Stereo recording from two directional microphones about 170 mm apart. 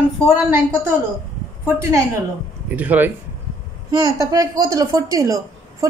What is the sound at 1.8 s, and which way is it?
Speech, 15° right (ahead or behind).